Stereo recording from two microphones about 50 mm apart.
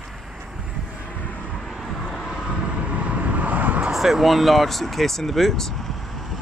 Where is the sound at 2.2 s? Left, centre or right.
Centre; by 3.9 s right.